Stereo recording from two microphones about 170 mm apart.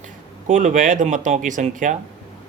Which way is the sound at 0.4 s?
50° right (ahead or behind).